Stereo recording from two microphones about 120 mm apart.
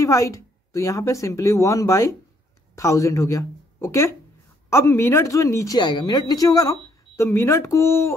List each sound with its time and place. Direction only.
0.0 s a woman's voice: 25° left (ahead or behind)
5.8 s speech: 40° left (ahead or behind); by 8.1 s 25° left (ahead or behind)